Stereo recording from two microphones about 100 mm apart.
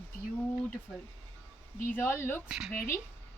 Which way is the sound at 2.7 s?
20° left (ahead or behind).